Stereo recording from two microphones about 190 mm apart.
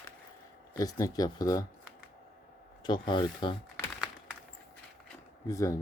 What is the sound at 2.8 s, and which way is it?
Speech, 25° left (ahead or behind).